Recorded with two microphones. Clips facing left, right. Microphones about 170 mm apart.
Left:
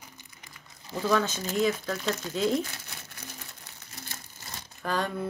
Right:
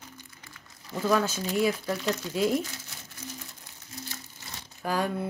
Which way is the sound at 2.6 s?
65° left (ahead or behind).